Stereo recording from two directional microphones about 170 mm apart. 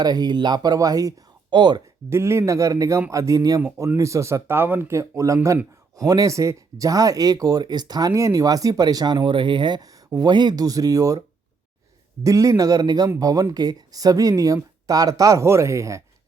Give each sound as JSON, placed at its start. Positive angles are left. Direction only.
{"t": 0.0, "sound": "speech", "side_deg": -25}
{"t": 2.0, "sound": "a man's voice", "side_deg": -15}
{"t": 12.2, "sound": "speech", "side_deg": -20}